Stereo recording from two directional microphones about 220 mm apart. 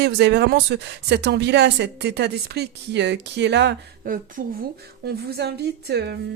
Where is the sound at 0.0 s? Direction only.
50° right (ahead or behind).